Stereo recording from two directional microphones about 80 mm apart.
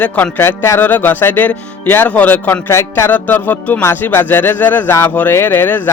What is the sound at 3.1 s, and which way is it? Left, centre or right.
Speech, left.